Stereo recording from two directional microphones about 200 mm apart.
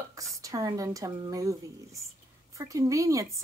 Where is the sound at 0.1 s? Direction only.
15° right (ahead or behind).